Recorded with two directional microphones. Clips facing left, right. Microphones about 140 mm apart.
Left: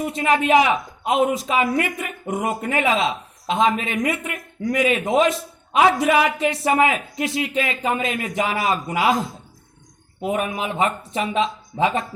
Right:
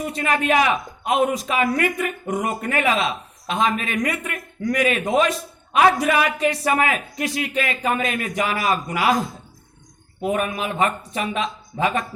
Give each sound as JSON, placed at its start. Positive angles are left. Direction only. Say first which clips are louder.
{"t": 0.0, "sound": "a man's voice", "louder": "left 3 dB", "side_deg": 20}